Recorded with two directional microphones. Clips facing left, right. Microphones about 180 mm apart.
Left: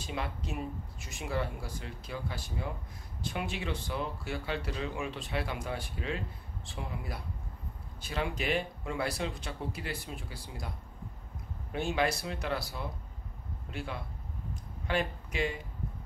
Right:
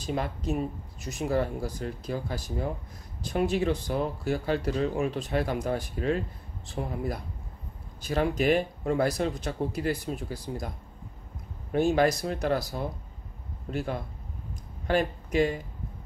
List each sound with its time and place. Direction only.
0.0 s speech: 40° right (ahead or behind)
11.7 s speech: 40° right (ahead or behind)
14.5 s a sound: 40° right (ahead or behind)